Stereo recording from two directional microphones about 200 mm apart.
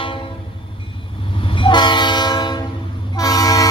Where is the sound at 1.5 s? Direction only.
25° left (ahead or behind).